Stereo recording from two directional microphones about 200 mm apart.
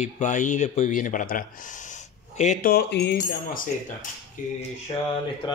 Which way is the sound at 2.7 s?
55° left (ahead or behind).